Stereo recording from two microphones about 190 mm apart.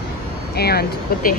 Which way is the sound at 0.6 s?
55° left (ahead or behind).